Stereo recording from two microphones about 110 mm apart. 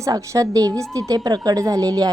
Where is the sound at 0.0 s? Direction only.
30° right (ahead or behind).